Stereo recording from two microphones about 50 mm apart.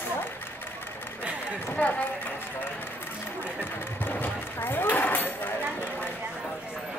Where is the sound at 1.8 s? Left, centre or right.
Left.